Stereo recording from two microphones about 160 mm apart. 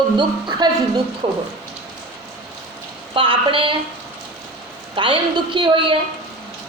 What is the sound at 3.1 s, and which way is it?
Speech, 30° right (ahead or behind).